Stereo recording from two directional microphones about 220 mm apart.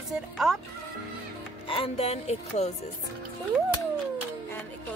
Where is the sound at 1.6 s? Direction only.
25° left (ahead or behind).